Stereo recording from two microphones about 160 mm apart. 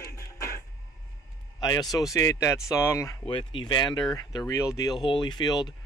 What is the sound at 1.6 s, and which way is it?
Speech, 25° left (ahead or behind).